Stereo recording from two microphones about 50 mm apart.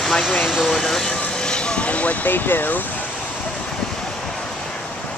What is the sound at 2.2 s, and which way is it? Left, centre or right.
Speech, left.